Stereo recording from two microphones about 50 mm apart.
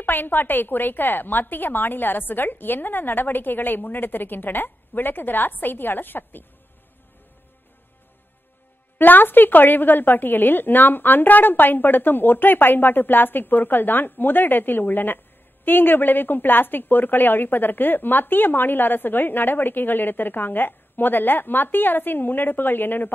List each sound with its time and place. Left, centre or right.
0.0 s a woman's voice: left
8.9 s a woman's voice: left